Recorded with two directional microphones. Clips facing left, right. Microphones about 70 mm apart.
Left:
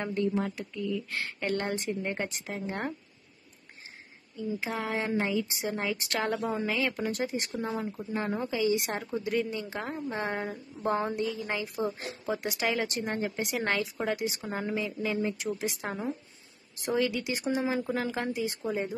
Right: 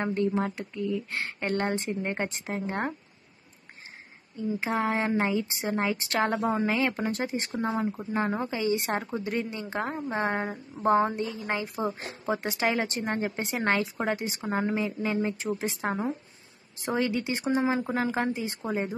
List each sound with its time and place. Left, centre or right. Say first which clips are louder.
0.0 s a woman's voice: right 2 dB; right
1.4 s speech: right 3 dB; right
4.4 s a woman's voice: right 5 dB; right
11.6 s a woman's voice: right 1 dB; right
11.9 s a woman's voice: right 3 dB; right